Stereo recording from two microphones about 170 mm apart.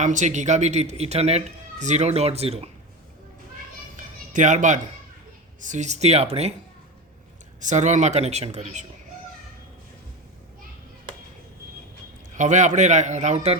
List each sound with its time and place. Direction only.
0.0 s speech: 45° right (ahead or behind)
3.9 s a sound: 45° right (ahead or behind)
5.6 s speech: 45° right (ahead or behind)
7.6 s a man's voice: 45° right (ahead or behind)
12.3 s a man's voice: 45° right (ahead or behind)